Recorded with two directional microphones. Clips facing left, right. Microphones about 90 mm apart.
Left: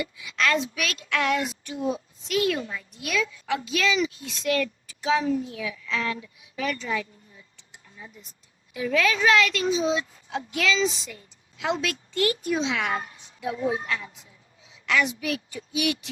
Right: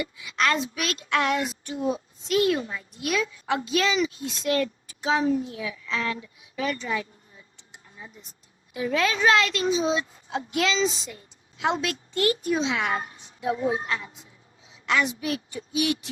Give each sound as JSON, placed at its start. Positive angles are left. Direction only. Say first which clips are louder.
{"t": 0.0, "sound": "a woman's voice", "louder": "right 1 dB", "side_deg": -30}
{"t": 8.7, "sound": "speech", "louder": "left 1 dB", "side_deg": -30}